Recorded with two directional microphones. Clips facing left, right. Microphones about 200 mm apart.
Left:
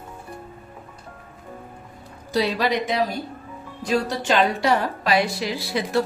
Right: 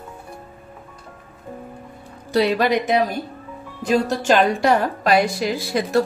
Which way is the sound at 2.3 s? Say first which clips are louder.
Right 4 dB; 55° right (ahead or behind).